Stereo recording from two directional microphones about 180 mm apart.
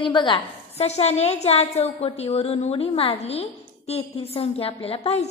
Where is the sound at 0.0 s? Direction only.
25° left (ahead or behind).